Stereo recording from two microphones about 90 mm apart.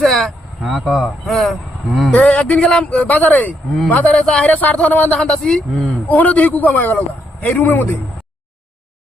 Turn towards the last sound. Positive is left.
turn(degrees=20)  # may be behind; listen again after turning